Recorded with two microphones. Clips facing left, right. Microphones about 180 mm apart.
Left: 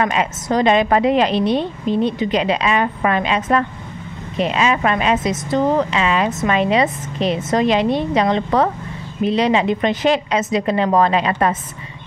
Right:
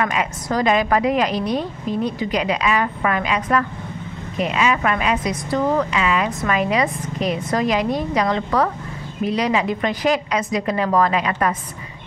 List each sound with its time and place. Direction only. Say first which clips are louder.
0.0 s a woman's voice: left 3 dB; 25° left (ahead or behind)